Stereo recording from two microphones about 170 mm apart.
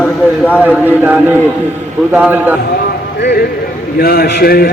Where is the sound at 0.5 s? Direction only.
10° right (ahead or behind).